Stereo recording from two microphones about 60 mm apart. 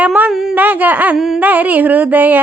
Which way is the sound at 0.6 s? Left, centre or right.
Right.